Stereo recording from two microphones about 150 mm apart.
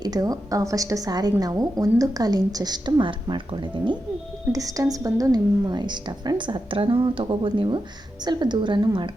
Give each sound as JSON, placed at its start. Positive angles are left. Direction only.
{"t": 0.0, "sound": "a woman's voice", "side_deg": -25}